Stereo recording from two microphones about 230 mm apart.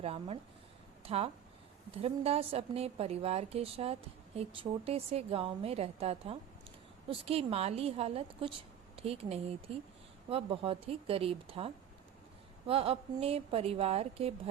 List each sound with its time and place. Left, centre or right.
0.0 s a woman's voice: right